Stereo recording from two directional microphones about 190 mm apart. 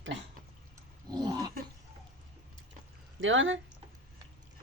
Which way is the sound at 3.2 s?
90° right.